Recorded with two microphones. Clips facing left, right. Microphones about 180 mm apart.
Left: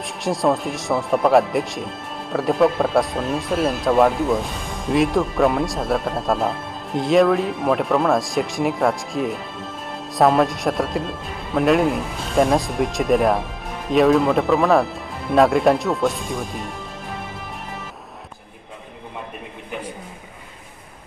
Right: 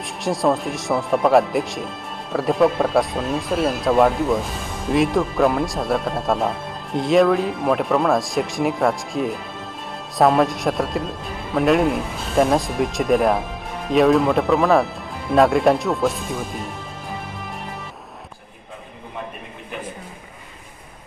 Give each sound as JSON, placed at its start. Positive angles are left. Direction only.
{"t": 0.0, "sound": "speech", "side_deg": 0}